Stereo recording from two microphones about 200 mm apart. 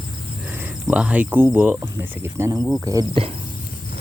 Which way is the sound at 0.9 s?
5° right (ahead or behind).